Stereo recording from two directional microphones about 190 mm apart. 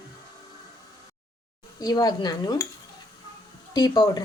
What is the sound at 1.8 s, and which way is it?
Speech, 20° left (ahead or behind).